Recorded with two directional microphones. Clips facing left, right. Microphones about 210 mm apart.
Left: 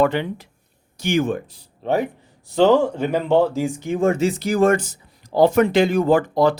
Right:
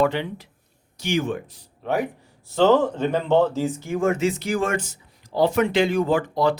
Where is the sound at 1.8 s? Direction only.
25° left (ahead or behind).